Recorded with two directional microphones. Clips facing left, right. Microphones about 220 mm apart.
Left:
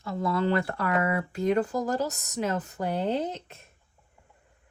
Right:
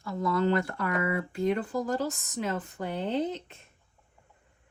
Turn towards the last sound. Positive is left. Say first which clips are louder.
# even
turn(degrees=45)  # may be behind; listen again after turning